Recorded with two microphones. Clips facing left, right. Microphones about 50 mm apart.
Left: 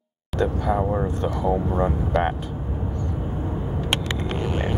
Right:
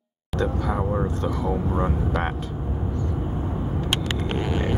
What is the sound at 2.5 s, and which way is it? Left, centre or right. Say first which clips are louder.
Vehicle: right 1 dB; centre.